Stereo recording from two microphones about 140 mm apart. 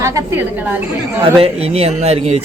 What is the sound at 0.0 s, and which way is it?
Speech, 20° right (ahead or behind).